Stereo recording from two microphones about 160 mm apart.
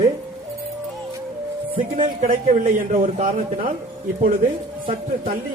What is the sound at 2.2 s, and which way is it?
Speech, 60° right (ahead or behind).